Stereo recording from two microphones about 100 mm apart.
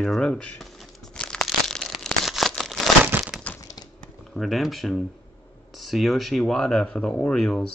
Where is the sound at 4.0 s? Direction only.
Centre (ahead or behind).